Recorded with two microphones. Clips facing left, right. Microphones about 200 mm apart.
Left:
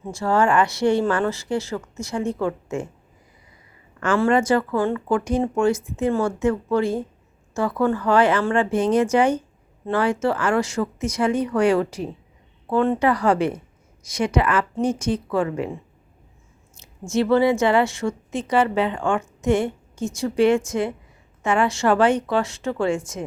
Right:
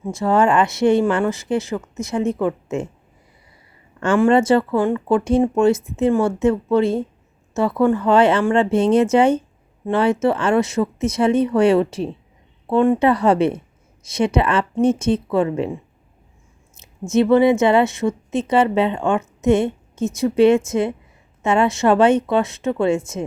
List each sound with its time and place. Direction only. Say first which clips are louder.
0.1 s a woman's voice: right 3 dB; 20° right (ahead or behind)
4.3 s a woman's voice: right 4 dB; 25° right (ahead or behind)
16.7 s a woman's voice: right 5 dB; 20° right (ahead or behind)